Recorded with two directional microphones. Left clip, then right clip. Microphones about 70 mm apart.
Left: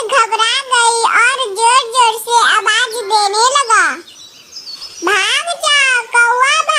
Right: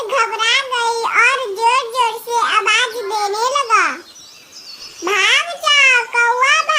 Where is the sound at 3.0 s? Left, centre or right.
Left.